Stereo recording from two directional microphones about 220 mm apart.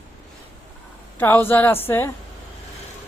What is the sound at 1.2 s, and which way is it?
Speech, 10° left (ahead or behind).